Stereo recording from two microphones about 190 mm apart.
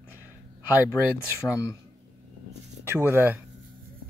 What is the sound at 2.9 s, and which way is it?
Speech, 10° right (ahead or behind).